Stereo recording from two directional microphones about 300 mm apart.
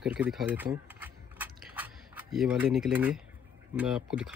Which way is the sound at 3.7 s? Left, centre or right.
Centre.